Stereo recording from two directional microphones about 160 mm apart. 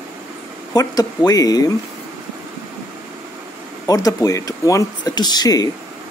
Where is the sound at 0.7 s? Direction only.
25° left (ahead or behind).